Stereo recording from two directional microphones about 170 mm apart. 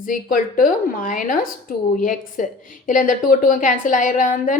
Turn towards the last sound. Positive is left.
turn(degrees=50)  # may be behind; listen again after turning